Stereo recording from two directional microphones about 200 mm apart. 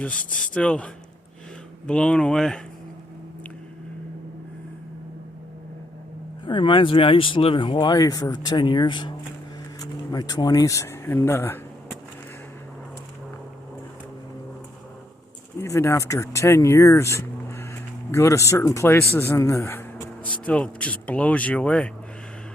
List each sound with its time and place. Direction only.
0.0 s speech: 5° left (ahead or behind)
1.9 s speech: 5° left (ahead or behind)
6.4 s speech: 25° left (ahead or behind)
15.6 s a man's voice: 15° left (ahead or behind)